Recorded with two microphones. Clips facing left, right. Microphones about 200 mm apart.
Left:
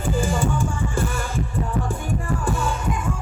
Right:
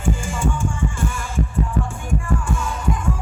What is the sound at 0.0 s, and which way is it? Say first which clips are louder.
Music: left 1 dB; 35° left (ahead or behind).